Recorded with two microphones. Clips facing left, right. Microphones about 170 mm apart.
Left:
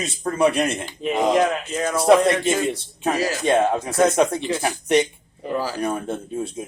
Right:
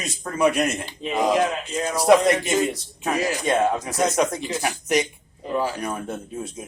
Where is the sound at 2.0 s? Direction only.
30° left (ahead or behind).